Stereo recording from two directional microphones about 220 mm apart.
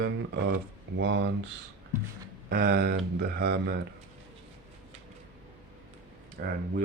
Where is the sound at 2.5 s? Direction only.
45° right (ahead or behind).